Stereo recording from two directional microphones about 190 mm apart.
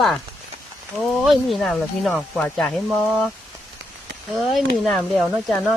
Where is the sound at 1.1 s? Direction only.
Centre (ahead or behind).